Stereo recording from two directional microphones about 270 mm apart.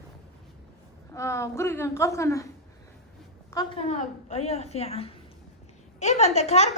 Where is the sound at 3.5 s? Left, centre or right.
Centre.